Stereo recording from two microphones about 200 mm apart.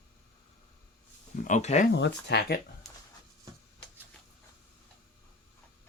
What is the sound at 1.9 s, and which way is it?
Speech, 60° left (ahead or behind).